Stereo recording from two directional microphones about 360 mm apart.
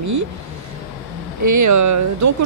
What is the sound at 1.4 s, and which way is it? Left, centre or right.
Speech, right.